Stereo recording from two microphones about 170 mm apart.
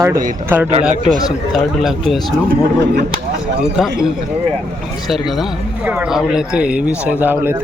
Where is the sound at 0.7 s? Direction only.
40° right (ahead or behind).